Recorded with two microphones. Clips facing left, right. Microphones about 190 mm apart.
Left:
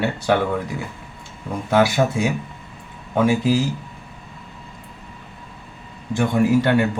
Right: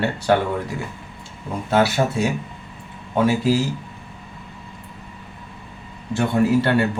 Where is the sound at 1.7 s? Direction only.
15° left (ahead or behind).